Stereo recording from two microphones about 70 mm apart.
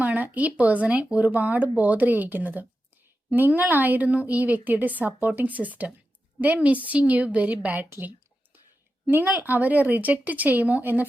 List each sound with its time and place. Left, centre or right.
0.0 s speech: right
7.9 s speech: right